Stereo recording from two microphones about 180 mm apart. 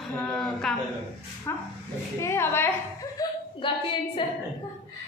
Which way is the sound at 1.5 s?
15° left (ahead or behind).